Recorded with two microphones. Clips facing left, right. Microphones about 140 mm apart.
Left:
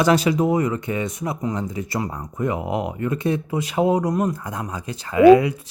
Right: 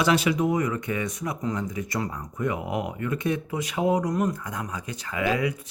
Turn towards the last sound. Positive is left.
turn(degrees=30)  # may be behind; listen again after turning